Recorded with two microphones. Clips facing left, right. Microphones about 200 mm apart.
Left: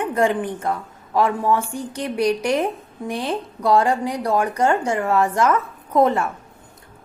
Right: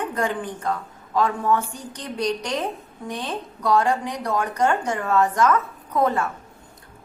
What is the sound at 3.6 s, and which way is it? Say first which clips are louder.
A woman's voice: left 3 dB; 30° left (ahead or behind).